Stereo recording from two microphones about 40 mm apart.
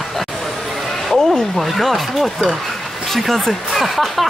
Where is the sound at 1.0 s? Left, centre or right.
Centre.